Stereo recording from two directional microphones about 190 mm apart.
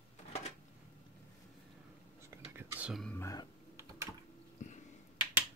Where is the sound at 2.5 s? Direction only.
10° right (ahead or behind).